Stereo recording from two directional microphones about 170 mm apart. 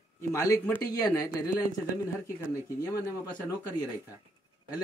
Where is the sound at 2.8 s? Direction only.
20° left (ahead or behind).